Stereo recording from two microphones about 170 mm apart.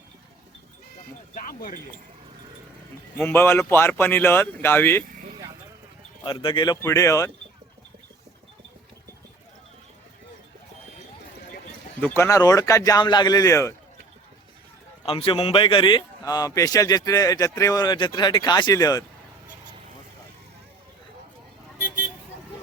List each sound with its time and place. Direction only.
1.4 s speech: 55° left (ahead or behind)
3.2 s speech: 15° left (ahead or behind)
6.2 s a man's voice: 30° left (ahead or behind)
6.8 s speech: 15° left (ahead or behind)
11.9 s a man's voice: 10° left (ahead or behind)
15.0 s a man's voice: 35° left (ahead or behind)